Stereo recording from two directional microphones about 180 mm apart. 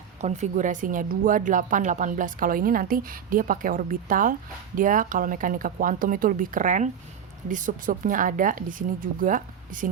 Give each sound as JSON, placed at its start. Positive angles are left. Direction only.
{"t": 0.2, "sound": "speech", "side_deg": -40}